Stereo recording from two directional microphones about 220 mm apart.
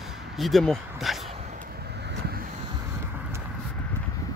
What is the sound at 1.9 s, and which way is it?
Vehicle, 50° right (ahead or behind).